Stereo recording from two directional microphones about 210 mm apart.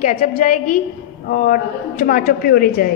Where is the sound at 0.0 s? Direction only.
40° left (ahead or behind).